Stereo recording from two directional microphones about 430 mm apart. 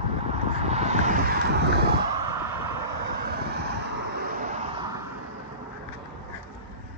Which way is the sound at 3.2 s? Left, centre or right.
Right.